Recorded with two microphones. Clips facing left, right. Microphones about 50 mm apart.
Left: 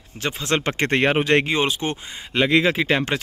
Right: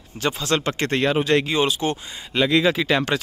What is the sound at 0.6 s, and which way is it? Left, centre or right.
Speech, left.